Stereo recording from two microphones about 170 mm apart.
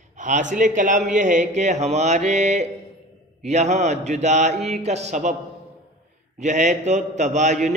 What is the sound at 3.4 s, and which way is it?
A man's voice, 40° right (ahead or behind).